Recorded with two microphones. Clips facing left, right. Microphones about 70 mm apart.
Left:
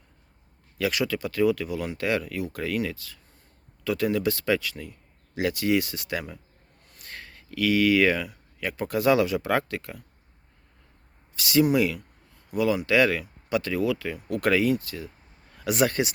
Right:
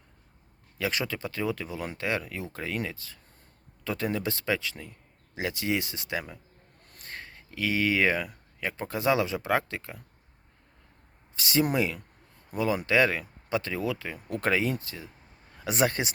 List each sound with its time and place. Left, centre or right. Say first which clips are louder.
0.8 s speech: left 4 dB; right
7.0 s a sound: even; right
8.6 s speech: left 4 dB; right
11.3 s speech: left 5 dB; right